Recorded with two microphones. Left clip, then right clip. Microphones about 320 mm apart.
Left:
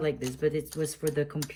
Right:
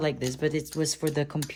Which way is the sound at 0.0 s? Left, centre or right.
Centre.